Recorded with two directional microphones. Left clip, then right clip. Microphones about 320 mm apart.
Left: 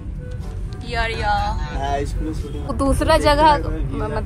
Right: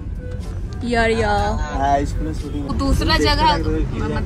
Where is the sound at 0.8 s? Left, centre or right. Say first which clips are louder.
Right 5 dB; centre.